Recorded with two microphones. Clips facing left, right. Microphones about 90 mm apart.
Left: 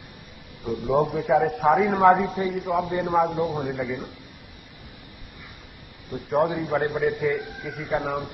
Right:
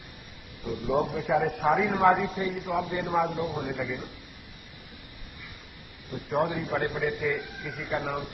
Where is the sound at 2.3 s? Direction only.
20° left (ahead or behind).